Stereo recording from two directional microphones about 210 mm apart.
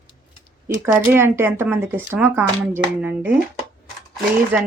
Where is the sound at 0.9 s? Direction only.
10° right (ahead or behind).